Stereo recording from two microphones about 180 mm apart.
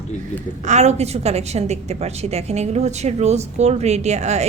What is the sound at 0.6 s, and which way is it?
A woman's voice, 40° right (ahead or behind).